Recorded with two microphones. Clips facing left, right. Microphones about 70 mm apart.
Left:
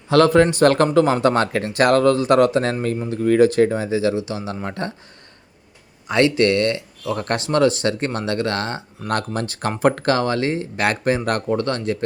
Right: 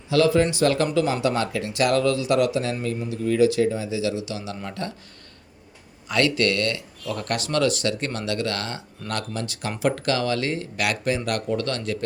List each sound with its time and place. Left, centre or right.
0.1 s speech: left
6.1 s speech: left